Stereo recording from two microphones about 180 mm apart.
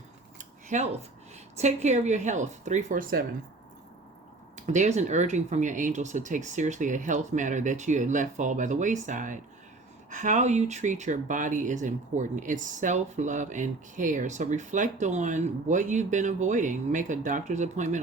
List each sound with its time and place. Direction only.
0.3 s cutlery: 45° right (ahead or behind)
1.5 s a woman's voice: 40° right (ahead or behind)
4.6 s speech: 45° right (ahead or behind)